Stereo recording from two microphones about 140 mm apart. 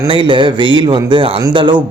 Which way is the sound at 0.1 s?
35° right (ahead or behind).